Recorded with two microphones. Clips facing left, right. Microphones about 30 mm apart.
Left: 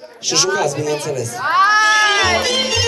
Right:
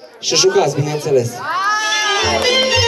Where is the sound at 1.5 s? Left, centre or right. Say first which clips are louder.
Left 10 dB; left.